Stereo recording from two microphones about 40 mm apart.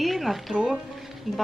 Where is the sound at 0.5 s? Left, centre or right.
Right.